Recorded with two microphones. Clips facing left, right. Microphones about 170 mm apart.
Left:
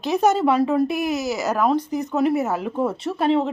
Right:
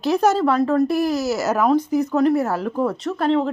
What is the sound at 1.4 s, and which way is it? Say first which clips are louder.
A woman's voice: right 2 dB; 5° right (ahead or behind).